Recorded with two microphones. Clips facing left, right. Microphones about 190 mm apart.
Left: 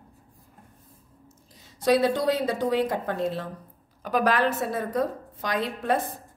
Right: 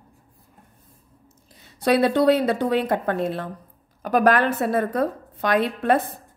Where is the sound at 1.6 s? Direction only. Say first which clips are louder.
Right 2 dB; 60° right (ahead or behind).